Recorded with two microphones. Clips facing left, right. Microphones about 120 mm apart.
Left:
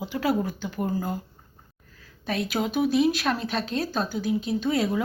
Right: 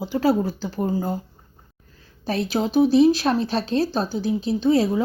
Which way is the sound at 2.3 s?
30° right (ahead or behind).